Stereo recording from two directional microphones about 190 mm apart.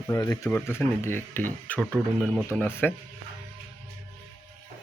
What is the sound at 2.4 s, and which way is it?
Speech, 10° left (ahead or behind).